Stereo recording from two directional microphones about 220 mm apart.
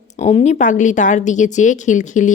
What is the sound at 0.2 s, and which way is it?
A woman's voice, 30° left (ahead or behind).